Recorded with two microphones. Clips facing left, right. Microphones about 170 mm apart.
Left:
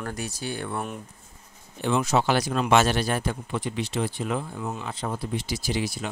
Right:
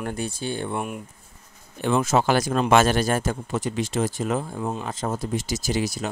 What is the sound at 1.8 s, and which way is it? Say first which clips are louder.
Speech: right 2 dB; 50° right (ahead or behind).